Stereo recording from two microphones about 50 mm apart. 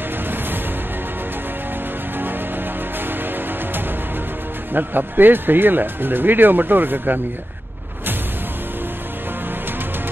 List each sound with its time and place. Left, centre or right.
4.7 s speech: right